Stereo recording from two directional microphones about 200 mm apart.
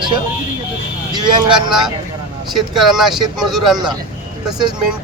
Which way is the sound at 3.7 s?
20° right (ahead or behind).